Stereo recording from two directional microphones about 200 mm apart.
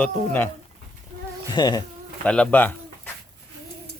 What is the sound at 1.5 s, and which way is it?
Insect, 20° left (ahead or behind).